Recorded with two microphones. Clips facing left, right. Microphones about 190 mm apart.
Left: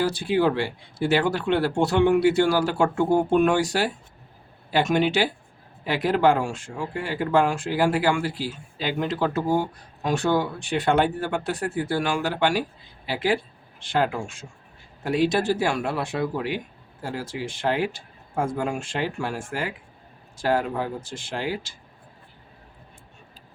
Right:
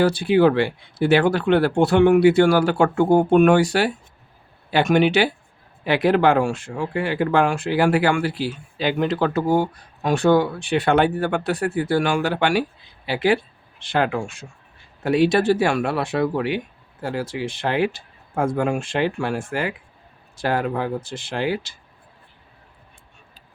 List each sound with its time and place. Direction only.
0.0 s speech: 65° right (ahead or behind)